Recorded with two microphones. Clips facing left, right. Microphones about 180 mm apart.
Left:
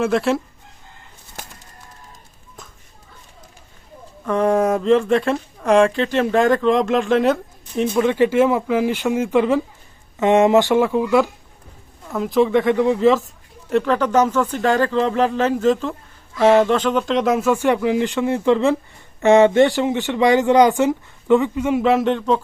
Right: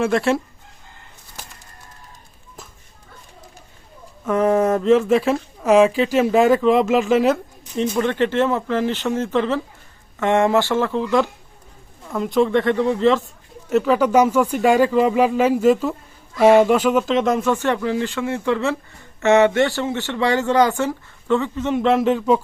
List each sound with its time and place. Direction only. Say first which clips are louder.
0.0 s speech: even; centre (ahead or behind)
4.3 s speech: even; 5° right (ahead or behind)